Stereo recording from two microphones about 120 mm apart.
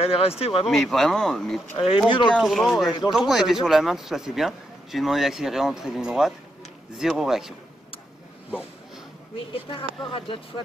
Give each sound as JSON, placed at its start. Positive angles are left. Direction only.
{"t": 0.0, "sound": "speech", "side_deg": 55}
{"t": 0.7, "sound": "a man's voice", "side_deg": 0}
{"t": 2.0, "sound": "speech", "side_deg": 45}
{"t": 2.3, "sound": "a man's voice", "side_deg": 0}
{"t": 8.5, "sound": "a sound", "side_deg": -10}
{"t": 9.5, "sound": "speech", "side_deg": 45}